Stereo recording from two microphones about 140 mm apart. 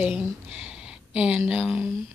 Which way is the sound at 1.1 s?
5° right (ahead or behind).